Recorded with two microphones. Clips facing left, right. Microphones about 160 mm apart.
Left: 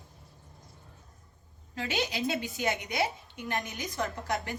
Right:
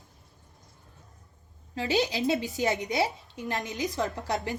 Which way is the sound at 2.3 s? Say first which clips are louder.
Right 5 dB; 20° left (ahead or behind).